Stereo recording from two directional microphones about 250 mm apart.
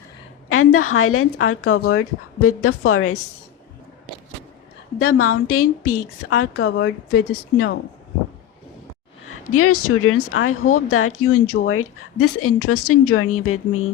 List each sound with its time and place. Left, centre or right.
0.4 s speech: left
4.9 s a woman's voice: left
9.2 s speech: left